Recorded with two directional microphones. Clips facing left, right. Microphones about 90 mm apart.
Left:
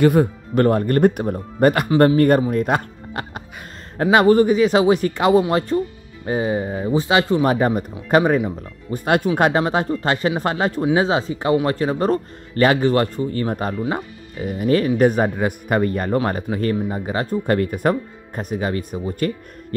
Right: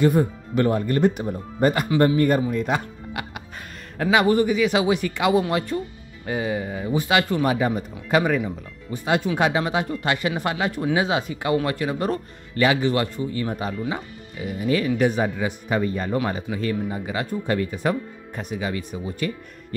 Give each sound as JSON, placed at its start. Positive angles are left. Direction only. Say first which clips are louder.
{"t": 0.0, "sound": "speech", "louder": "left 4 dB", "side_deg": 65}
{"t": 2.5, "sound": "music", "louder": "left 4 dB", "side_deg": 50}
{"t": 4.0, "sound": "speech", "louder": "left 5 dB", "side_deg": 40}
{"t": 7.4, "sound": "speech", "louder": "left 4 dB", "side_deg": 45}
{"t": 9.3, "sound": "speech", "louder": "left 4 dB", "side_deg": 40}